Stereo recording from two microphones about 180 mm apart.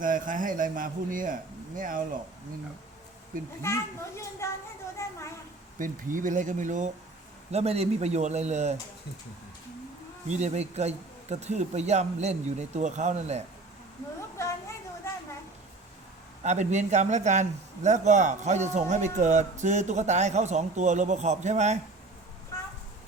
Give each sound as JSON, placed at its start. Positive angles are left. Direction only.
{"t": 0.0, "sound": "a man's voice", "side_deg": -50}
{"t": 3.6, "sound": "a child's voice", "side_deg": 15}
{"t": 5.8, "sound": "a man's voice", "side_deg": -50}
{"t": 10.2, "sound": "a man's voice", "side_deg": -40}
{"t": 14.4, "sound": "a sound", "side_deg": 15}
{"t": 16.4, "sound": "a man's voice", "side_deg": -40}